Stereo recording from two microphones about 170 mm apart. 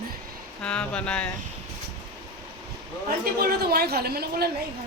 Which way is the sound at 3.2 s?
65° right (ahead or behind).